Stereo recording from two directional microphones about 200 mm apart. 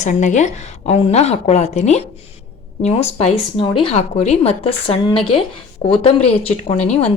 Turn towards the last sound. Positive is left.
turn(degrees=30)  # may be behind; listen again after turning